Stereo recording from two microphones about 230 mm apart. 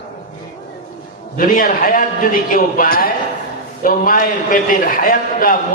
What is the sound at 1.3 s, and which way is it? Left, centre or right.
A man's voice, left.